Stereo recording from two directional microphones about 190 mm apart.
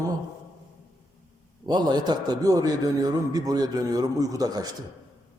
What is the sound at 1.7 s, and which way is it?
A man's voice, 20° right (ahead or behind).